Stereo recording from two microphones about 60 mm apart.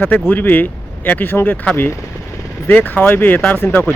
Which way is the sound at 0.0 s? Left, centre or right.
Left.